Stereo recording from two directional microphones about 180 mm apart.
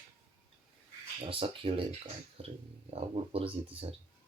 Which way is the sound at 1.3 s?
30° right (ahead or behind).